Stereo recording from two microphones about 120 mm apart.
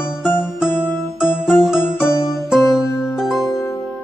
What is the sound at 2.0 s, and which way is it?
Music, 25° left (ahead or behind).